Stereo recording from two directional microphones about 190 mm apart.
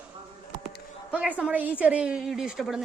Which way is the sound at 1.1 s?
5° right (ahead or behind).